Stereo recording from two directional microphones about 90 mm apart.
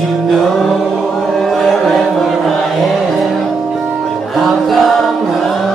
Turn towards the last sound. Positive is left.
turn(degrees=0)  # may be behind; listen again after turning